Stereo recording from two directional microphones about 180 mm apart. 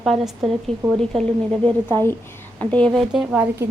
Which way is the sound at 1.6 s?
25° right (ahead or behind).